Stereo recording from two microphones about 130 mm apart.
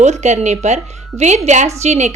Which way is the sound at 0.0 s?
60° right (ahead or behind).